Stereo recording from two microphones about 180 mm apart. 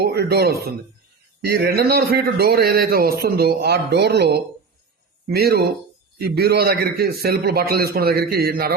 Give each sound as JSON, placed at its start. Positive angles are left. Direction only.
{"t": 0.0, "sound": "a man's voice", "side_deg": -65}